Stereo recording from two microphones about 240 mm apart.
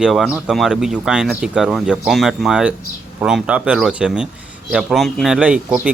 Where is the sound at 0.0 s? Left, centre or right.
Centre.